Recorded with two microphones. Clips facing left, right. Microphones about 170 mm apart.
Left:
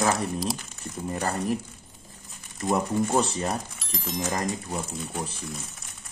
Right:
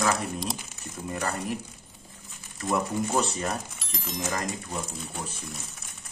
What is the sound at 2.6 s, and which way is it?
Speech, 30° left (ahead or behind).